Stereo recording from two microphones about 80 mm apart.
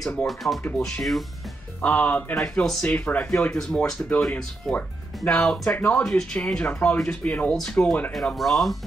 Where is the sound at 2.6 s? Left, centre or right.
Centre.